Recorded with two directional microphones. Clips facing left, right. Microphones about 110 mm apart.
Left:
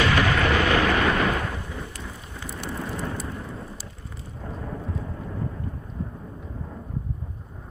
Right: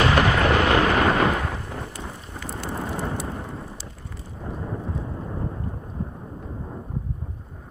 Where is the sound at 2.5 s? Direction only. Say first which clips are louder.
Right 2 dB; 40° right (ahead or behind).